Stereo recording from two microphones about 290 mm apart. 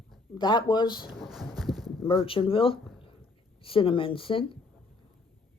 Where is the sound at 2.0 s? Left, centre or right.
Centre.